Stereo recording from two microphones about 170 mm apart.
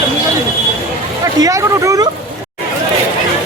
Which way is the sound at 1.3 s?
20° right (ahead or behind).